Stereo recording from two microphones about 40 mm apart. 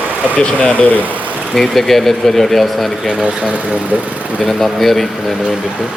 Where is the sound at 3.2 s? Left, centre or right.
Right.